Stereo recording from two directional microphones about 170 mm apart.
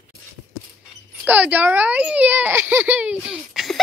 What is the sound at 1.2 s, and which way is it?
A child's voice, 10° right (ahead or behind).